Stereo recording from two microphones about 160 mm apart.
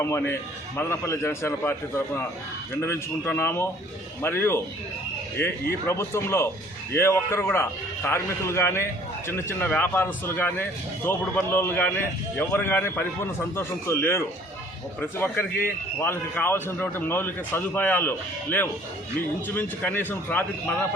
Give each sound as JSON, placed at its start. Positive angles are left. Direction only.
{"t": 0.0, "sound": "speech", "side_deg": 15}
{"t": 2.8, "sound": "speech", "side_deg": 15}
{"t": 19.5, "sound": "speech", "side_deg": 15}